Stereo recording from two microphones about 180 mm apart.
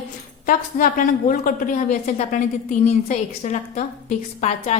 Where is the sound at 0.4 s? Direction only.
50° left (ahead or behind).